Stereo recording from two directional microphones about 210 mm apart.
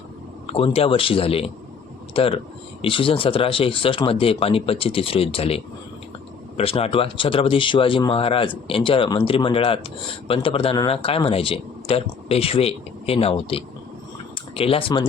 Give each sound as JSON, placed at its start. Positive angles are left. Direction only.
{"t": 0.5, "sound": "speech", "side_deg": 25}